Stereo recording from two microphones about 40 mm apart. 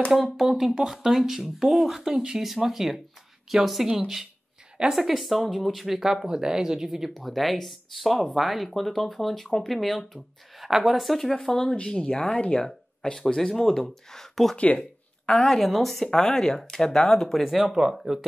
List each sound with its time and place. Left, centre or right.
0.1 s speech: centre
7.2 s speech: centre
11.8 s speech: centre
12.6 s speech: centre
14.6 s speech: left
15.2 s speech: centre